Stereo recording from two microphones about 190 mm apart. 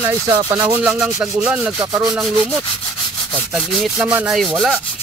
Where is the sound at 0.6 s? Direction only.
5° right (ahead or behind).